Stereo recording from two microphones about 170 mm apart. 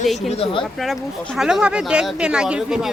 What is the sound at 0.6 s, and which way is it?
Speech, centre (ahead or behind).